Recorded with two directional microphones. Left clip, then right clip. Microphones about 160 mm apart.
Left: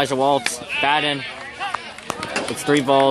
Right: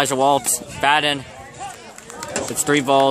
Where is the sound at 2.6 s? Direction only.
35° right (ahead or behind).